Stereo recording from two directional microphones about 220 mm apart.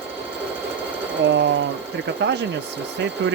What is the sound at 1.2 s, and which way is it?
Speech, 50° right (ahead or behind).